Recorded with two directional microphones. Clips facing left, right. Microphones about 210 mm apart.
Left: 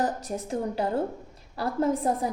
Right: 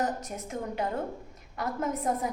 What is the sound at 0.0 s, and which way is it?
A woman's voice, 30° left (ahead or behind).